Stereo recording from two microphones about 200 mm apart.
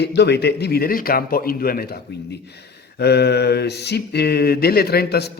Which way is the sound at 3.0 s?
55° left (ahead or behind).